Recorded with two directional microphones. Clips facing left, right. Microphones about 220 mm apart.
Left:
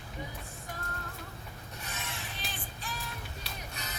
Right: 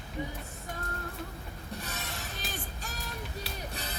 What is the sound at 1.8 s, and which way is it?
Music, 35° right (ahead or behind).